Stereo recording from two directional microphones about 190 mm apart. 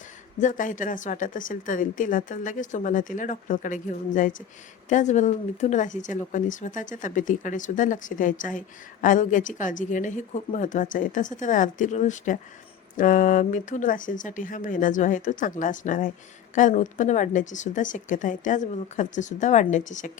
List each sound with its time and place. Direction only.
0.3 s a woman's voice: 40° left (ahead or behind)